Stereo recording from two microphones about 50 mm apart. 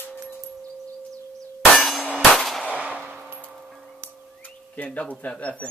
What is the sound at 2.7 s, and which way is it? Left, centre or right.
Gunshot, right.